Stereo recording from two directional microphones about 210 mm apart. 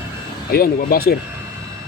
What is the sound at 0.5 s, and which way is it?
Speech, 45° left (ahead or behind).